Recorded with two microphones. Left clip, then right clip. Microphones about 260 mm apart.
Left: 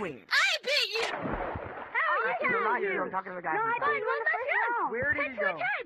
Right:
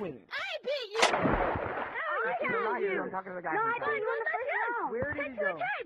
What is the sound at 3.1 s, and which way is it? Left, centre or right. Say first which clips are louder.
Speech: left 3 dB; left.